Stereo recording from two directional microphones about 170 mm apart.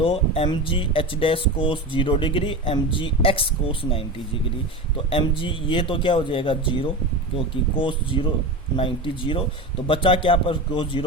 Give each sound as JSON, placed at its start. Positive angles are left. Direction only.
{"t": 0.0, "sound": "speech", "side_deg": 35}